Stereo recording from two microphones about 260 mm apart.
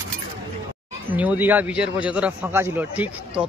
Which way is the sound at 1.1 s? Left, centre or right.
Centre.